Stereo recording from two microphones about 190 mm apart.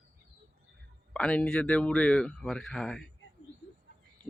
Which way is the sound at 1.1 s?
5° left (ahead or behind).